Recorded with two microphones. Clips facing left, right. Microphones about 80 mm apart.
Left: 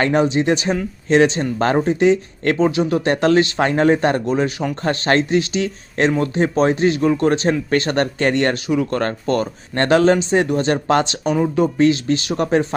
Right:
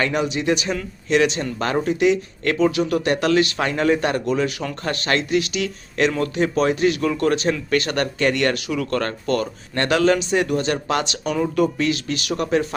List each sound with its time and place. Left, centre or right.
0.0 s speech: left